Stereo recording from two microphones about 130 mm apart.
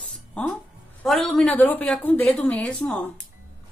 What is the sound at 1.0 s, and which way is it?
Speech, centre (ahead or behind).